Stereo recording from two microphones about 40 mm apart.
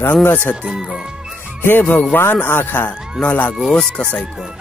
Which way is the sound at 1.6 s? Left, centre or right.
Left.